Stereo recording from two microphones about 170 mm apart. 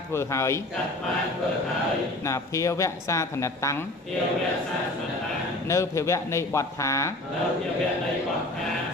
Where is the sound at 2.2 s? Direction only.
15° left (ahead or behind).